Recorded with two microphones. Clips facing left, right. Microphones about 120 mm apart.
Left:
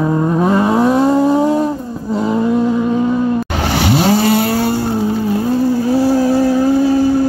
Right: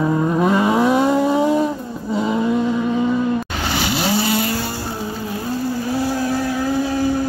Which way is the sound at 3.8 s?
55° left (ahead or behind).